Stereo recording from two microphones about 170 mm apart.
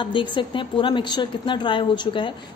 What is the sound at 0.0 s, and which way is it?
A woman's voice, 30° left (ahead or behind).